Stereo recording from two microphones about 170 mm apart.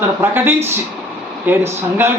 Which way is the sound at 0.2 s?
15° right (ahead or behind).